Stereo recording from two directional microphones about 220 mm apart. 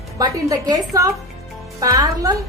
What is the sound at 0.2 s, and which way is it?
A woman's voice, 15° right (ahead or behind).